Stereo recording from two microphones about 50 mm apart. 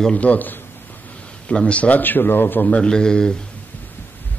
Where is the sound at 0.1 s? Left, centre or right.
Left.